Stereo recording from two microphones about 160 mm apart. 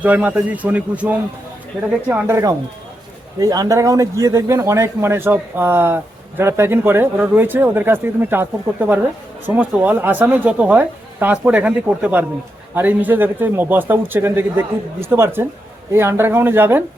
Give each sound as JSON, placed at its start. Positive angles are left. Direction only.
{"t": 0.0, "sound": "speech", "side_deg": -10}